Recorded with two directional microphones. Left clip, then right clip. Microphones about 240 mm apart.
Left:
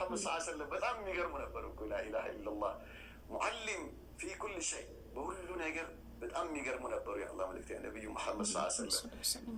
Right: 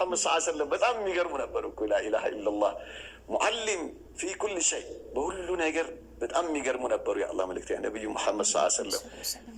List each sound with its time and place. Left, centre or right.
0.0 s a man's voice: right
8.9 s speech: centre